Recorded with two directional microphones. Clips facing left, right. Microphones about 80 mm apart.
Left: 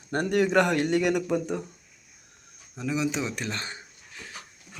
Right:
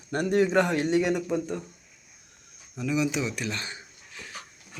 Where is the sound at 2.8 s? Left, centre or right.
Left.